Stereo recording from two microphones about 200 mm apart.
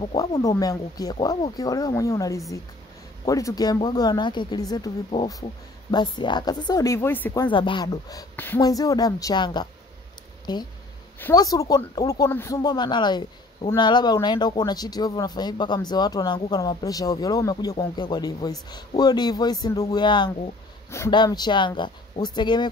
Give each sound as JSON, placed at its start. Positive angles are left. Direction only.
{"t": 0.0, "sound": "speech", "side_deg": 25}
{"t": 7.4, "sound": "speech", "side_deg": 25}